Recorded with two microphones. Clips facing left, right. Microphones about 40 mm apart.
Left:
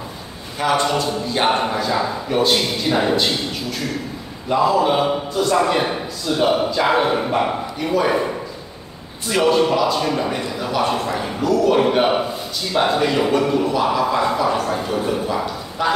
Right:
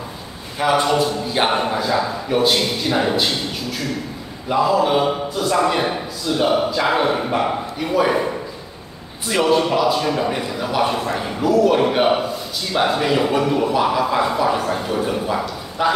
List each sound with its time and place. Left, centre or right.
0.6 s a man's voice: centre
4.5 s a man's voice: centre
9.3 s a man's voice: centre